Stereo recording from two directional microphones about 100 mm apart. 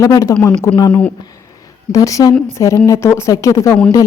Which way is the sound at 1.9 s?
35° left (ahead or behind).